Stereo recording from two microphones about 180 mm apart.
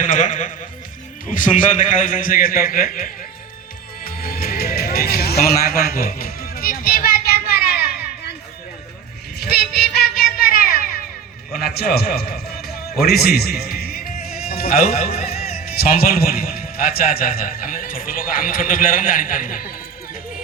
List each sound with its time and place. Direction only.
0.0 s a man's voice: 45° left (ahead or behind)
4.0 s music: 55° left (ahead or behind)
9.4 s music: 60° left (ahead or behind)
14.8 s speech: 35° left (ahead or behind)
15.5 s a man's voice: 55° left (ahead or behind)